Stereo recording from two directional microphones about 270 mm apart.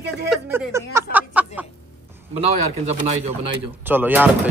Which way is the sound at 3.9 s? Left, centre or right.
Centre.